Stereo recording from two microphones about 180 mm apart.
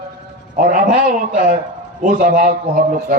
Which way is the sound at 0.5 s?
50° right (ahead or behind).